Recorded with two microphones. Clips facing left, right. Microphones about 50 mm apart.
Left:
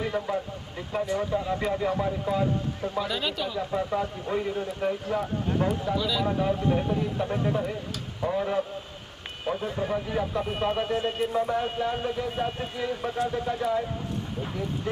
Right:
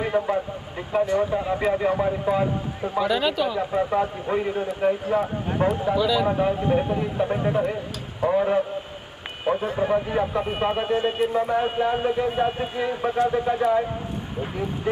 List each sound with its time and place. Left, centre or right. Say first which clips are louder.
0.0 s speech: right 5 dB; right; by 3.5 s centre
3.5 s speech: right 5 dB; right
5.9 s speech: right 6 dB; centre
6.2 s speech: right 4 dB; right